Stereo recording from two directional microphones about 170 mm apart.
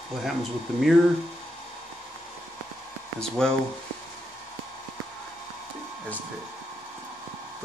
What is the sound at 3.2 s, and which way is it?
Speech, 5° left (ahead or behind).